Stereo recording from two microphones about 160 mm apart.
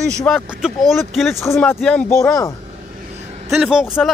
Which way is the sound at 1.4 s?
15° left (ahead or behind).